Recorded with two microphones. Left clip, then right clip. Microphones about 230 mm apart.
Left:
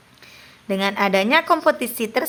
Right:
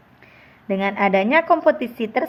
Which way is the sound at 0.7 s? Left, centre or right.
Centre.